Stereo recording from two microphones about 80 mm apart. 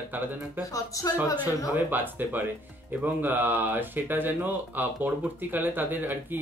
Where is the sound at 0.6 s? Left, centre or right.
Left.